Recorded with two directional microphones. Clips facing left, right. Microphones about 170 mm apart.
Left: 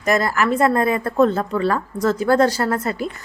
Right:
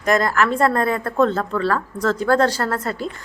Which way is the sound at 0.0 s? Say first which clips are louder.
Right 1 dB; 5° left (ahead or behind).